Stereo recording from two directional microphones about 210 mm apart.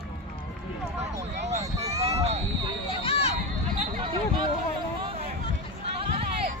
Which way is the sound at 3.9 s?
25° right (ahead or behind).